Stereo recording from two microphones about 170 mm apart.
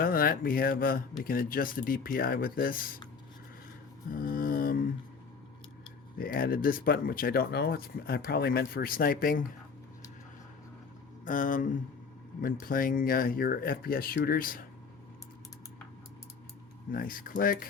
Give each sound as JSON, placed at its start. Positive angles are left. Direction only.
{"t": 0.0, "sound": "speech", "side_deg": 60}
{"t": 4.1, "sound": "a sound", "side_deg": 55}
{"t": 6.1, "sound": "speech", "side_deg": 60}
{"t": 11.3, "sound": "speech", "side_deg": 50}
{"t": 16.9, "sound": "speech", "side_deg": 55}